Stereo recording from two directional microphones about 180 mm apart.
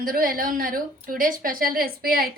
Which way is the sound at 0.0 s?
50° right (ahead or behind).